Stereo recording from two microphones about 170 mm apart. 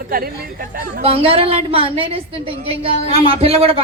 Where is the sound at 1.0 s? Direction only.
35° right (ahead or behind).